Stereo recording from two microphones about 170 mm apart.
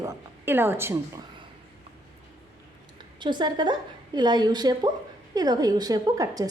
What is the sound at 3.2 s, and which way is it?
A woman's voice, 25° right (ahead or behind).